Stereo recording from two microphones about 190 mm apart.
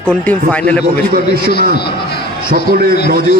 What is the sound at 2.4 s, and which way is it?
Speech, 50° right (ahead or behind).